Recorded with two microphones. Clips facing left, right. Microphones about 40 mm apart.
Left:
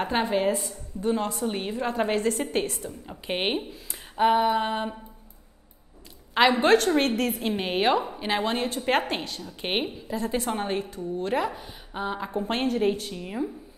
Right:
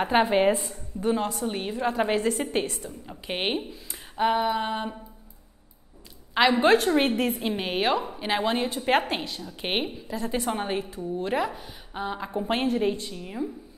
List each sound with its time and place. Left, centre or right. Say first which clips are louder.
0.0 s a woman's voice: right 3 dB; centre
0.4 s a woman's voice: right 3 dB; right
1.0 s a woman's voice: even; centre
6.3 s a woman's voice: even; centre
13.0 s a woman's voice: left 2 dB; centre